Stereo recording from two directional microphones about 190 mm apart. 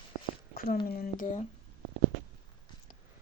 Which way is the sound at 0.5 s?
50° left (ahead or behind).